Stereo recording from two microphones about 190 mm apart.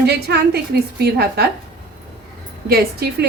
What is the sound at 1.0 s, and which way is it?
Speech, 55° right (ahead or behind).